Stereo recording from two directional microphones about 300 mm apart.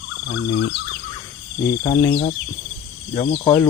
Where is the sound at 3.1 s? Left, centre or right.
Centre.